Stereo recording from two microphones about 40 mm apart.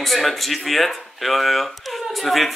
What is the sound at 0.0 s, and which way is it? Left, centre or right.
Speech, centre.